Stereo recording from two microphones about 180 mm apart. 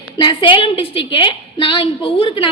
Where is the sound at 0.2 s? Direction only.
25° left (ahead or behind).